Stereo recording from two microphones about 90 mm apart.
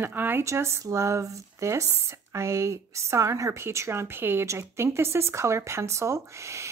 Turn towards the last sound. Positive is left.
turn(degrees=-35)  # may be behind; listen again after turning